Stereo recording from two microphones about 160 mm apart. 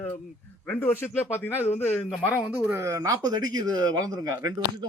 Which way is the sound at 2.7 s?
20° right (ahead or behind).